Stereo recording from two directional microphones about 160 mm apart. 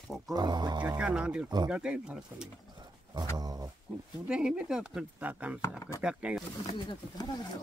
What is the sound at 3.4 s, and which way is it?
Speech, 25° right (ahead or behind).